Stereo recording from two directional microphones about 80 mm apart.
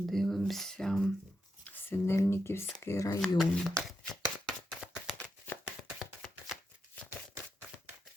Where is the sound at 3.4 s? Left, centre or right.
Centre.